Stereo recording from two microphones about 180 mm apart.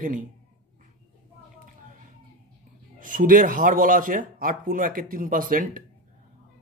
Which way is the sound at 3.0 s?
50° right (ahead or behind).